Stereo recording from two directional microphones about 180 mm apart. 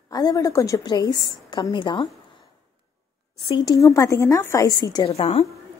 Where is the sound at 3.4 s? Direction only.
25° left (ahead or behind).